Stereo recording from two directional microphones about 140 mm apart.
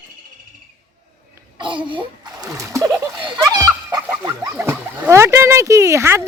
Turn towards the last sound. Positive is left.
turn(degrees=-20)  # may be behind; listen again after turning